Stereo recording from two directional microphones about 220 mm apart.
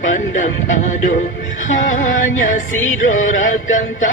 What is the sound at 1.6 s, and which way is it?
Music, 35° left (ahead or behind).